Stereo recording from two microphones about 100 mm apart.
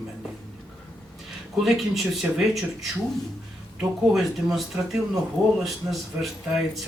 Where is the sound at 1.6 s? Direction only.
Centre (ahead or behind).